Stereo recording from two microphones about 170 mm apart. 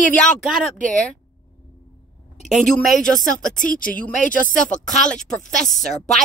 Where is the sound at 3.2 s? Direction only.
50° left (ahead or behind).